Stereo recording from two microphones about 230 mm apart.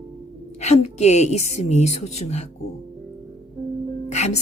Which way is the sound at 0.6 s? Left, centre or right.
Left.